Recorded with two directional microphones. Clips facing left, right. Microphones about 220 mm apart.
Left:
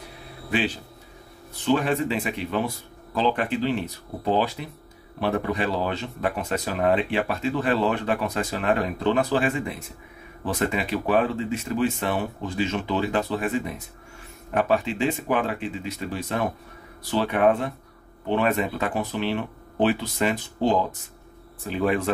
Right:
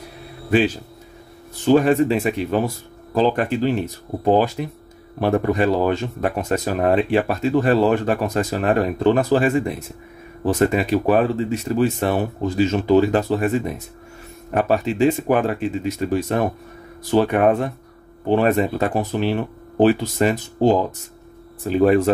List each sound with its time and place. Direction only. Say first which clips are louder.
1.6 s speech: right 8 dB; 45° right (ahead or behind)
14.5 s speech: right 3 dB; 40° right (ahead or behind)